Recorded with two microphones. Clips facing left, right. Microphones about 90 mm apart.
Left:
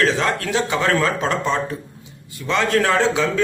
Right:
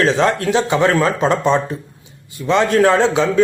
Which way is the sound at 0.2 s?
25° right (ahead or behind).